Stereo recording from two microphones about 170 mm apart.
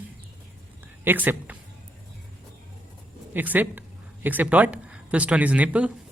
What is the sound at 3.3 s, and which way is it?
Speech, 10° right (ahead or behind).